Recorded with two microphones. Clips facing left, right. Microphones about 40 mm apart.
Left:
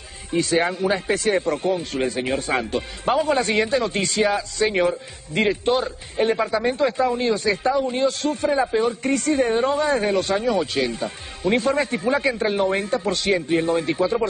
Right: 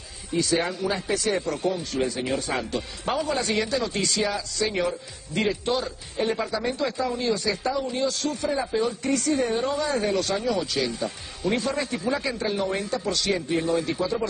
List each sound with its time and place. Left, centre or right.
0.3 s a man's voice: left